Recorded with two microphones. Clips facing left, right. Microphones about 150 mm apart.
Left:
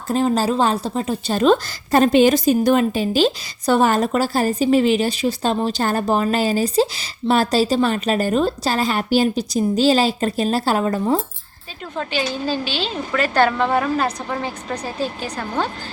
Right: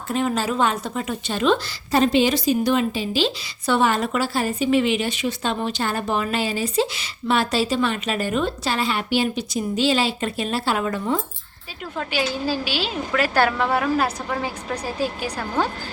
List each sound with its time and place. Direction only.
0.1 s a woman's voice: 35° left (ahead or behind)
11.9 s a woman's voice: 10° right (ahead or behind)